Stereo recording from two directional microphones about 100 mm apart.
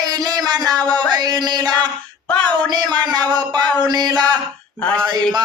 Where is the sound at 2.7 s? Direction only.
45° right (ahead or behind).